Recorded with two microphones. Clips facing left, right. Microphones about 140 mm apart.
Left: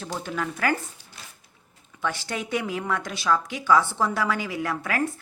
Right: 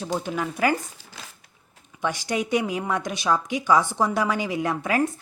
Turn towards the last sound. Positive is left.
turn(degrees=-20)  # may be behind; listen again after turning